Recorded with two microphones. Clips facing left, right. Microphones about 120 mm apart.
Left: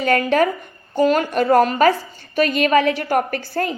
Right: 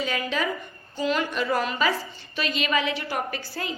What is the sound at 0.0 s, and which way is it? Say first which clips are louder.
A woman's voice: left 10 dB; 55° left (ahead or behind).